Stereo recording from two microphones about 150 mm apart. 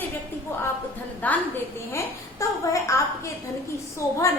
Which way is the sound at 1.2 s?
10° left (ahead or behind).